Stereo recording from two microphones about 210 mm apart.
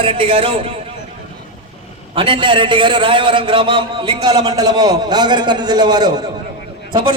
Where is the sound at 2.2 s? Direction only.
25° right (ahead or behind).